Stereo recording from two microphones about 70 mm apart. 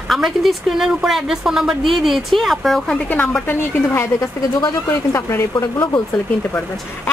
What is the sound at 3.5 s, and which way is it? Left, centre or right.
Speech, left.